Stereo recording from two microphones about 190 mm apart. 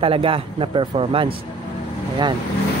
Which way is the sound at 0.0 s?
30° right (ahead or behind).